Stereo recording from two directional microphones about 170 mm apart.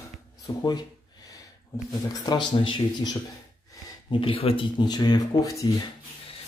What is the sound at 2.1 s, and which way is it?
Speech, 25° left (ahead or behind).